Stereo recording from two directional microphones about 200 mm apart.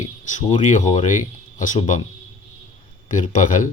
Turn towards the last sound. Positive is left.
turn(degrees=40)  # may be behind; listen again after turning